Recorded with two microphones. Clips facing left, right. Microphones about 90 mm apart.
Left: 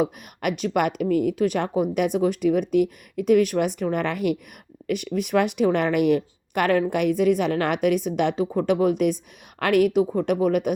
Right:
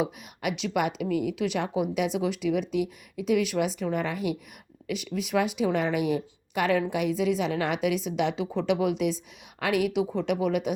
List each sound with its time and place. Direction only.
0.0 s speech: 50° left (ahead or behind)